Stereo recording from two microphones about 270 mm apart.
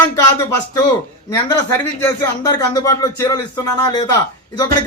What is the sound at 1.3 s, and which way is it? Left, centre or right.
A man's voice, centre.